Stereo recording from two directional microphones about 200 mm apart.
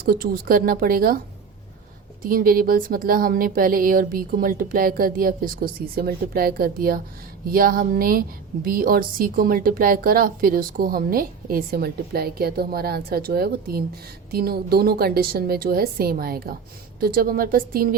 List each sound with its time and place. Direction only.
0.0 s a woman's voice: 45° right (ahead or behind)
2.2 s a woman's voice: 45° right (ahead or behind)